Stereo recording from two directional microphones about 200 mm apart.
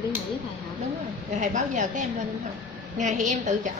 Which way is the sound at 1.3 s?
40° right (ahead or behind).